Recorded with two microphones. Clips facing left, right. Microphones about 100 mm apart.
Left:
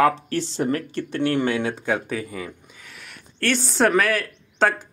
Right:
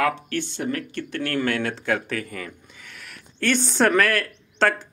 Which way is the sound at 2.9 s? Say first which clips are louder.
Even; centre (ahead or behind).